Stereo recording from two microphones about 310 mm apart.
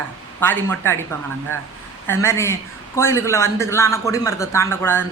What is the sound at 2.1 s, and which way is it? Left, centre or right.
A man's voice, centre.